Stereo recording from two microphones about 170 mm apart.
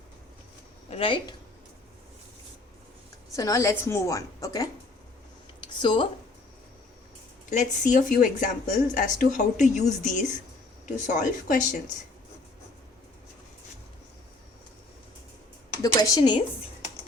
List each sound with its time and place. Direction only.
0.9 s speech: 35° left (ahead or behind)
3.3 s a woman's voice: 20° left (ahead or behind)
5.5 s a sound: 30° left (ahead or behind)
7.5 s speech: 50° left (ahead or behind)
15.8 s a woman's voice: 25° left (ahead or behind)